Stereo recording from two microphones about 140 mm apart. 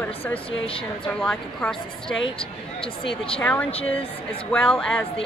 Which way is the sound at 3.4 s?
10° left (ahead or behind).